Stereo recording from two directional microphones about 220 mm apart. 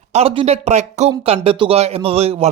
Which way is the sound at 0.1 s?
30° right (ahead or behind).